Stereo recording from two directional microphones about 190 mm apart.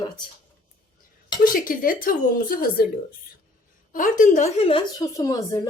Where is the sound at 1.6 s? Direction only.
50° left (ahead or behind).